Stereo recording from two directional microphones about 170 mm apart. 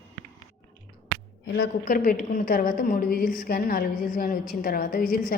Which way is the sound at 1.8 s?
50° left (ahead or behind).